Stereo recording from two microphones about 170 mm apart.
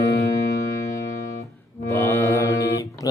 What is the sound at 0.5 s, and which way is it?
Music, 20° left (ahead or behind).